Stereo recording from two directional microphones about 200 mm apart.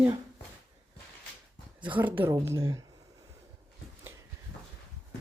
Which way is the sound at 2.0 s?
10° right (ahead or behind).